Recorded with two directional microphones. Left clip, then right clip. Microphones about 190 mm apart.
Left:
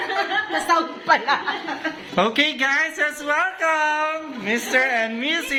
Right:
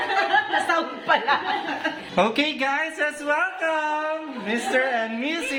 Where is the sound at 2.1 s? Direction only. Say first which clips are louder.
Left 3 dB; centre (ahead or behind).